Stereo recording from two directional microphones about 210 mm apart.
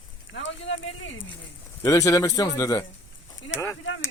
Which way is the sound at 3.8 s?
65° left (ahead or behind).